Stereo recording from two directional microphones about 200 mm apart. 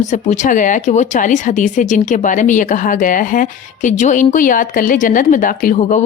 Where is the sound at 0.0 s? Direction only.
35° left (ahead or behind).